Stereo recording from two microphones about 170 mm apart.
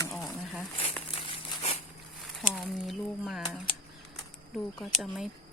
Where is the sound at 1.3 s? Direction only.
35° left (ahead or behind).